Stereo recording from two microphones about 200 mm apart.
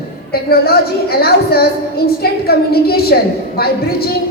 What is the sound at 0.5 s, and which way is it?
A woman's voice, 50° left (ahead or behind).